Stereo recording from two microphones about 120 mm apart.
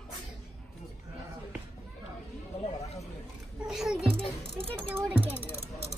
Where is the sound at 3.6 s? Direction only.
5° right (ahead or behind).